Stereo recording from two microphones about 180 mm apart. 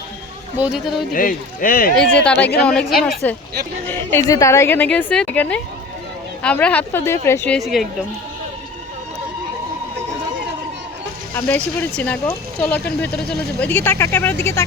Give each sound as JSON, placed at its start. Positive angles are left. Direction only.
{"t": 0.6, "sound": "speech", "side_deg": 0}
{"t": 1.1, "sound": "speech", "side_deg": 50}
{"t": 2.0, "sound": "a woman's voice", "side_deg": 5}
{"t": 11.3, "sound": "a woman's voice", "side_deg": 10}